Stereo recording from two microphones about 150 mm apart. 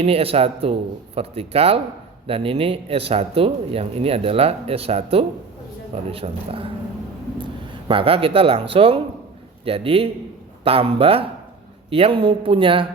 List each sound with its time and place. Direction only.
0.0 s speech: 40° right (ahead or behind)
7.9 s speech: 35° right (ahead or behind)